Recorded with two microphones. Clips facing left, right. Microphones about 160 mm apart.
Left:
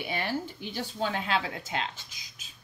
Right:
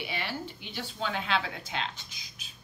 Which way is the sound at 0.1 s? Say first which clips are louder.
Left 4 dB; 45° left (ahead or behind).